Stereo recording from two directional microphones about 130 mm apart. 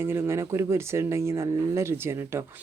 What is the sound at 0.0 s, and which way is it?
Speech, 20° right (ahead or behind).